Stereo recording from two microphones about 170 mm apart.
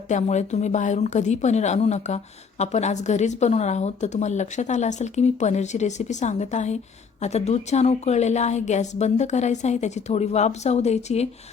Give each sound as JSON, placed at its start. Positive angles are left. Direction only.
{"t": 0.1, "sound": "a woman's voice", "side_deg": 45}